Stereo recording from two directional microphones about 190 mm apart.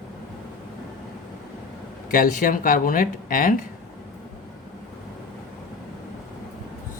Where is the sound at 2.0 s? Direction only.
50° left (ahead or behind).